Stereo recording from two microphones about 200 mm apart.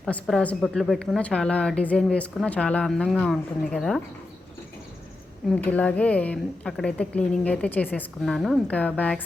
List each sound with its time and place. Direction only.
0.0 s a woman's voice: centre (ahead or behind)
5.5 s a woman's voice: 10° left (ahead or behind)